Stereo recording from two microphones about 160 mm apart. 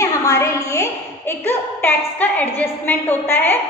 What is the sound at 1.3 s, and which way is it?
A woman's voice, 15° left (ahead or behind).